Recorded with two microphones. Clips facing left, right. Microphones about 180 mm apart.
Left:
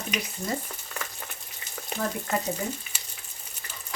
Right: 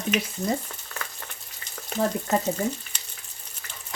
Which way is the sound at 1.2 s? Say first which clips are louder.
Left 1 dB; 5° left (ahead or behind).